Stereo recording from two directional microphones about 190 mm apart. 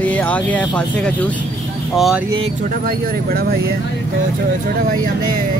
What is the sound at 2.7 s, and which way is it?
Speech, 50° right (ahead or behind).